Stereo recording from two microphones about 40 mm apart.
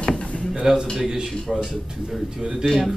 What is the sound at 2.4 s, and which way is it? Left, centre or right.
Speech, centre.